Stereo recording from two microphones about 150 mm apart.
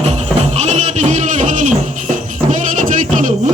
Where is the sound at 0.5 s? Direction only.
50° right (ahead or behind).